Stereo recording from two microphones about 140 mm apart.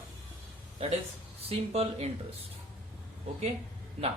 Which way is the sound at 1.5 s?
45° right (ahead or behind).